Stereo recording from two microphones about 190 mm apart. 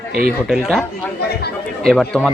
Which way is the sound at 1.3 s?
55° left (ahead or behind).